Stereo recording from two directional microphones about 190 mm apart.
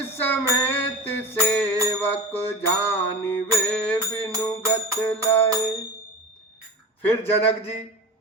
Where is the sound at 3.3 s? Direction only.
10° left (ahead or behind).